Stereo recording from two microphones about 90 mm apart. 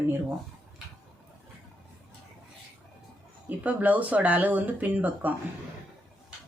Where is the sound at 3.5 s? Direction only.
15° right (ahead or behind).